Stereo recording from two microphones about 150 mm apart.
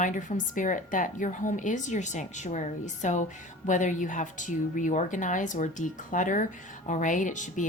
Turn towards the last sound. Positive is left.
turn(degrees=55)  # may be behind; listen again after turning